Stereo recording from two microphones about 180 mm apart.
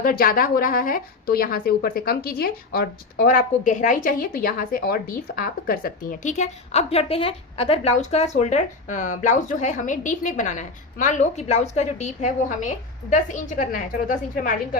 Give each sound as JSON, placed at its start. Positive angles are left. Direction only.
{"t": 0.0, "sound": "a woman's voice", "side_deg": 55}